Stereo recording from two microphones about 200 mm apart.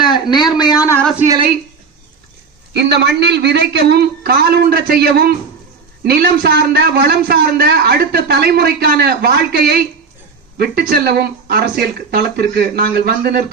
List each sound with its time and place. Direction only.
0.0 s a man's voice: 20° left (ahead or behind)
2.7 s a man's voice: 55° right (ahead or behind)